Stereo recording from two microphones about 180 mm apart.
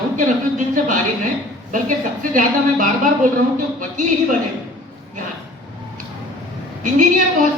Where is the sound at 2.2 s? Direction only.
50° right (ahead or behind).